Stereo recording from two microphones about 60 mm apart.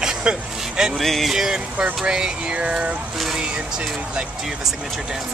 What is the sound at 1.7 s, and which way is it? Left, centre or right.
Speech, centre.